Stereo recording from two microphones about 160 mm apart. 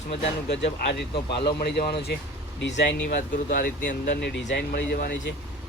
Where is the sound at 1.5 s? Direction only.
85° left.